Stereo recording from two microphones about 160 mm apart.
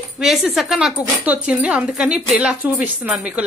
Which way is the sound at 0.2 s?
Centre (ahead or behind).